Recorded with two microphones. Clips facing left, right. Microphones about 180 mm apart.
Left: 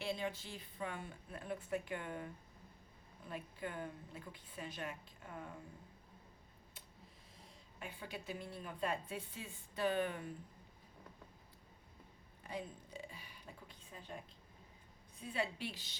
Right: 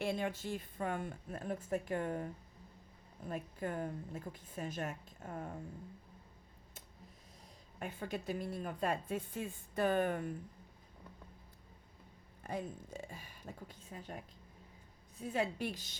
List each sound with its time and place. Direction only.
0.0 s speech: 50° right (ahead or behind)
7.8 s speech: 45° right (ahead or behind)
12.4 s a woman's voice: 45° right (ahead or behind)
15.3 s speech: 45° right (ahead or behind)